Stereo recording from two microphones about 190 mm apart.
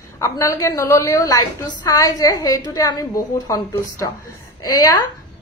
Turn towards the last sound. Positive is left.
turn(degrees=15)  # may be behind; listen again after turning